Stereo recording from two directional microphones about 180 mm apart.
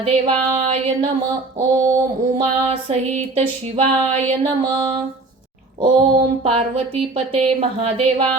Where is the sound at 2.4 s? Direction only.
30° right (ahead or behind).